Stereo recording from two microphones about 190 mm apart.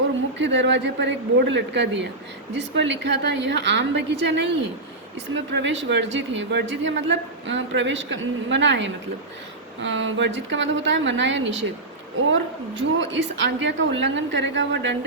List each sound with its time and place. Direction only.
0.3 s speech: 75° right (ahead or behind)